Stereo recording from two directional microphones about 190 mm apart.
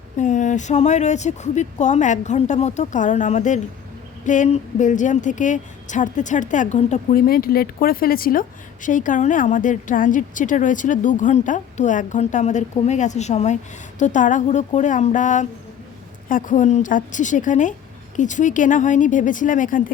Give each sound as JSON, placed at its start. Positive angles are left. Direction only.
{"t": 0.2, "sound": "speech", "side_deg": 40}